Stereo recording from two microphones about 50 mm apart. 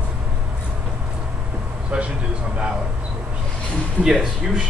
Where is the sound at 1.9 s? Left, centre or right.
Right.